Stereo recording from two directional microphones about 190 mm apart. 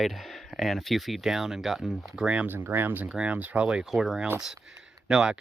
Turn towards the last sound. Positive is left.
turn(degrees=-5)  # may be behind; listen again after turning